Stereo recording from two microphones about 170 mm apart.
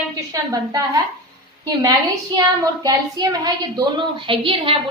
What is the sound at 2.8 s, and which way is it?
A woman's voice, 25° right (ahead or behind).